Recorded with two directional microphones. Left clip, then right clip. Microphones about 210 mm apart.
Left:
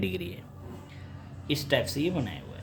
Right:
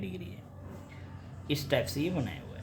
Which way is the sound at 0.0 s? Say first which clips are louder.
Left 10 dB; 45° left (ahead or behind).